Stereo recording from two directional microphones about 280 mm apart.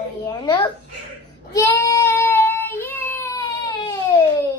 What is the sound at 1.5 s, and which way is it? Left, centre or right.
Child singing, centre.